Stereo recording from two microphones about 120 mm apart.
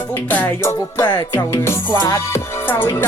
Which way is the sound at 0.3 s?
15° left (ahead or behind).